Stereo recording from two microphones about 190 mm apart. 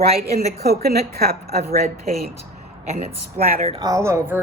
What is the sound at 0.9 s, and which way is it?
Speech, 55° right (ahead or behind).